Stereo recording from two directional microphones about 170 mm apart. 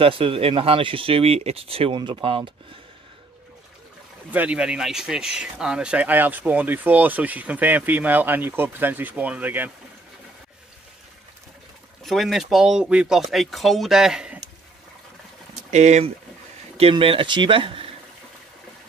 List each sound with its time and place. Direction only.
0.0 s speech: 30° right (ahead or behind)
4.3 s speech: 10° right (ahead or behind)
12.0 s speech: centre (ahead or behind)
15.5 s speech: 45° right (ahead or behind)